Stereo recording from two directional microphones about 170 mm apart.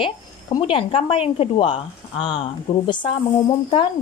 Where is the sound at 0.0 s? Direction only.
30° left (ahead or behind).